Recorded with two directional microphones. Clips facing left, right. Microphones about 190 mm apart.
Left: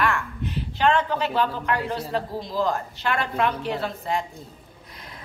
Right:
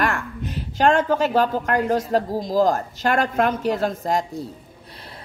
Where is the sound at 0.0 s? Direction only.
45° right (ahead or behind).